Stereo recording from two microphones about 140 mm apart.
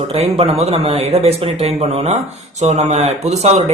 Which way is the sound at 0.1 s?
45° right (ahead or behind).